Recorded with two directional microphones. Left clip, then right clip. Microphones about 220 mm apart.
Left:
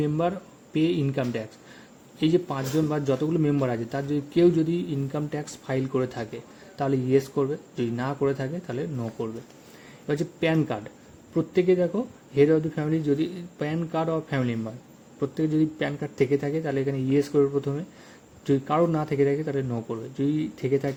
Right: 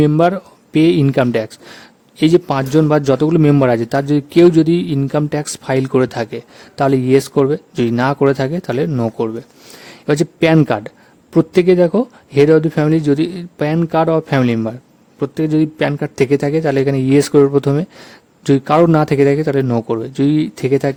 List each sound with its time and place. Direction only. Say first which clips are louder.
0.0 s a man's voice: right 13 dB; 50° right (ahead or behind)